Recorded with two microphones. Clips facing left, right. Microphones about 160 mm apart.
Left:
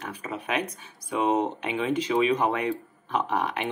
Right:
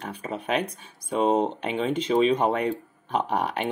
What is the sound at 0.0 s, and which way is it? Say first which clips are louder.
Speech: right 2 dB; 30° right (ahead or behind).